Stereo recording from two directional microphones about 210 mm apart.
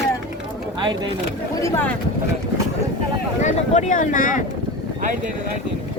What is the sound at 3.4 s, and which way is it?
Speech, 35° left (ahead or behind).